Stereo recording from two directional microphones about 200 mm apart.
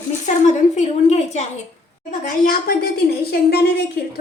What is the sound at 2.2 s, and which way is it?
A woman's voice, 45° left (ahead or behind).